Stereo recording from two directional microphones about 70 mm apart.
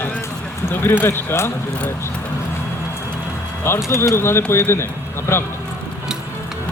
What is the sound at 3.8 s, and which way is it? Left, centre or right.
Speech, left.